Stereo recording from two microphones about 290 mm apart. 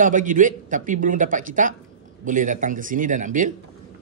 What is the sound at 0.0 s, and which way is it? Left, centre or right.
Speech, right.